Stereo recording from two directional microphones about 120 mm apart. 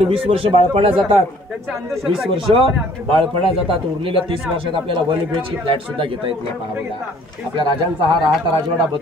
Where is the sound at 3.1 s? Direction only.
50° right (ahead or behind).